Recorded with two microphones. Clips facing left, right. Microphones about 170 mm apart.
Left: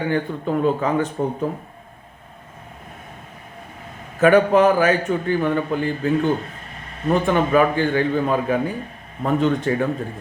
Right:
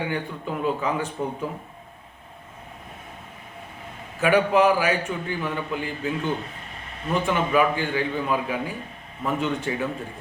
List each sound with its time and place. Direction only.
0.0 s a man's voice: 45° left (ahead or behind)
4.2 s a man's voice: 40° left (ahead or behind)